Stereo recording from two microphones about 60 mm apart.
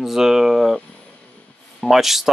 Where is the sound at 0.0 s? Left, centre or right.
Centre.